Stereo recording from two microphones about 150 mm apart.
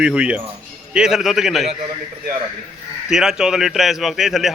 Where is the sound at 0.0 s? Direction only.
5° right (ahead or behind).